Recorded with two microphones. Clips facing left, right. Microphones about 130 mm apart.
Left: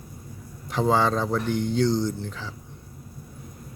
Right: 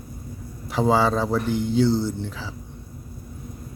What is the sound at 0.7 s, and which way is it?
Speech, 10° right (ahead or behind).